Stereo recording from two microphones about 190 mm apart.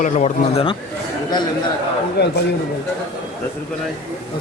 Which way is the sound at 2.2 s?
60° left (ahead or behind).